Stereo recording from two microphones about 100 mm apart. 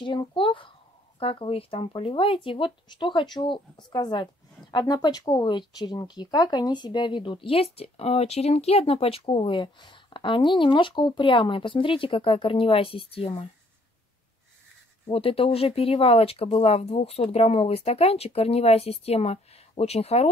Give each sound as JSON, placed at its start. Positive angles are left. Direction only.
{"t": 0.3, "sound": "speech", "side_deg": 60}
{"t": 15.1, "sound": "speech", "side_deg": 70}